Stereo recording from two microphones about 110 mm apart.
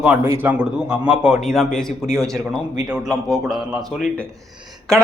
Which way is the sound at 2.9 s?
Centre (ahead or behind).